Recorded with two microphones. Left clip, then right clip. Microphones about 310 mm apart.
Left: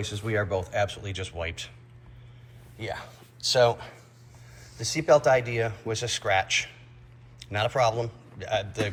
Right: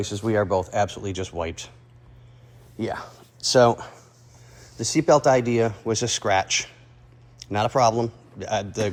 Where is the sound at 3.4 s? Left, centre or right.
Right.